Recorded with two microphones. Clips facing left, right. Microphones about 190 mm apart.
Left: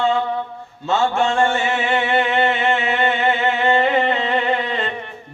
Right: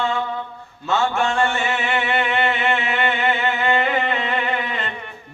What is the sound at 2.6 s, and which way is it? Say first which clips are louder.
Music: left 3 dB; 30° left (ahead or behind).